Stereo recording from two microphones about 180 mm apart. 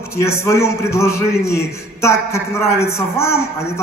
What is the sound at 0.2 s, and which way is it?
A man's voice, 15° left (ahead or behind).